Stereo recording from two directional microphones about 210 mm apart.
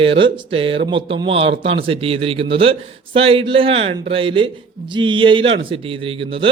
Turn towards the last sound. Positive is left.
turn(degrees=-25)  # may be behind; listen again after turning